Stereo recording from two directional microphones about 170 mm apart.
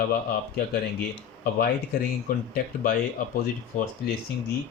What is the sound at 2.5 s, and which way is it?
Speech, 55° left (ahead or behind).